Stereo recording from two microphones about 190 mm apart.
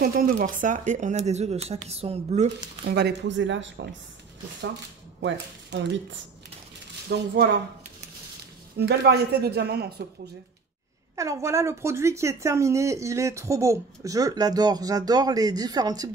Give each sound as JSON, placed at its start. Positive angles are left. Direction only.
{"t": 0.0, "sound": "speech", "side_deg": -50}
{"t": 2.8, "sound": "speech", "side_deg": -60}
{"t": 5.2, "sound": "speech", "side_deg": -70}
{"t": 7.1, "sound": "a woman's voice", "side_deg": -60}
{"t": 8.7, "sound": "a woman's voice", "side_deg": -60}
{"t": 11.1, "sound": "speech", "side_deg": -15}